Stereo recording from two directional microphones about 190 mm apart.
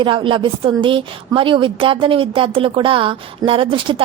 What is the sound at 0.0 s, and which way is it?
A woman's voice, 25° right (ahead or behind).